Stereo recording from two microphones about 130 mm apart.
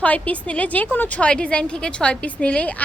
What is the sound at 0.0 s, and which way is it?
A woman's voice, 10° left (ahead or behind).